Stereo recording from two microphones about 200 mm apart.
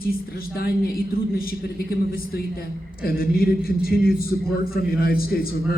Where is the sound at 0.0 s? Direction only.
50° left (ahead or behind).